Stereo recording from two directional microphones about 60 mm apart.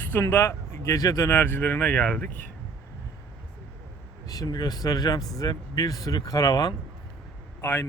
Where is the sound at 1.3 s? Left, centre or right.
Left.